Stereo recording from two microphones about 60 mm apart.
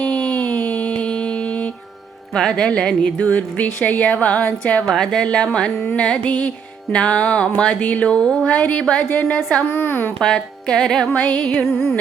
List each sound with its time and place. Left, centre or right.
0.0 s music: centre
2.3 s music: centre
3.2 s speech: left
4.9 s music: centre
6.9 s speech: centre
9.7 s speech: left
10.2 s music: centre
11.1 s speech: left
11.6 s music: centre